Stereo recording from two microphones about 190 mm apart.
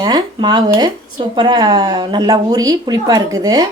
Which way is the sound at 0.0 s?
20° right (ahead or behind).